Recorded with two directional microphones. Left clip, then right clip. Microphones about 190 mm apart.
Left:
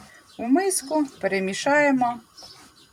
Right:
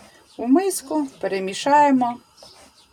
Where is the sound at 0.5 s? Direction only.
20° right (ahead or behind).